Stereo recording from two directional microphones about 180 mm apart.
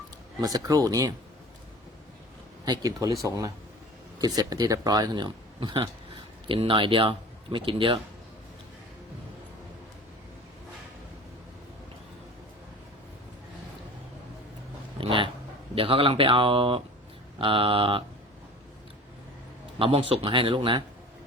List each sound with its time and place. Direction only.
0.4 s speech: 20° right (ahead or behind)
2.6 s speech: 20° right (ahead or behind)
14.9 s a sound: 30° right (ahead or behind)
15.7 s speech: 30° right (ahead or behind)
19.8 s speech: 30° right (ahead or behind)